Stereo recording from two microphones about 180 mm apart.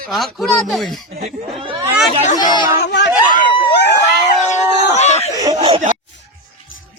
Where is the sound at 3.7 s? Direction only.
70° left (ahead or behind).